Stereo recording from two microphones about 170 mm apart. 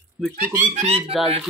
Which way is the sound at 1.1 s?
Centre (ahead or behind).